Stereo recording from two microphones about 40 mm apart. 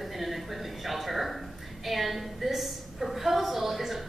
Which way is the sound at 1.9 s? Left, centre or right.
Centre.